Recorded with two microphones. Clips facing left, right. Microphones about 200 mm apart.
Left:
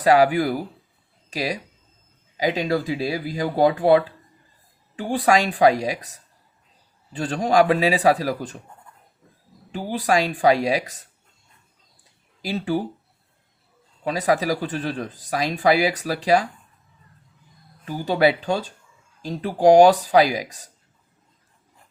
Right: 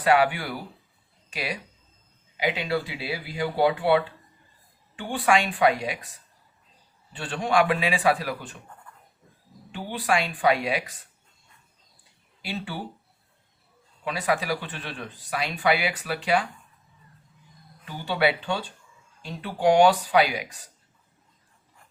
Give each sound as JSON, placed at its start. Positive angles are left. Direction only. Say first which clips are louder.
{"t": 0.0, "sound": "speech", "louder": "left 5 dB", "side_deg": 40}
{"t": 7.2, "sound": "speech", "louder": "left 5 dB", "side_deg": 40}
{"t": 9.7, "sound": "speech", "louder": "left 5 dB", "side_deg": 40}
{"t": 12.4, "sound": "speech", "louder": "left 9 dB", "side_deg": 40}
{"t": 14.0, "sound": "speech", "louder": "left 6 dB", "side_deg": 40}
{"t": 17.8, "sound": "speech", "louder": "left 6 dB", "side_deg": 40}